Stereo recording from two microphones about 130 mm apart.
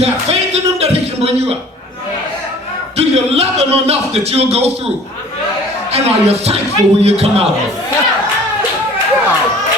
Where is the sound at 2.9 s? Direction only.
50° right (ahead or behind).